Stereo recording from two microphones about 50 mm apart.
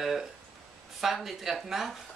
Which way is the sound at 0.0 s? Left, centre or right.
Centre.